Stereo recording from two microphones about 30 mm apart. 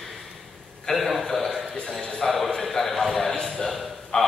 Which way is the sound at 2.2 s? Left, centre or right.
Centre.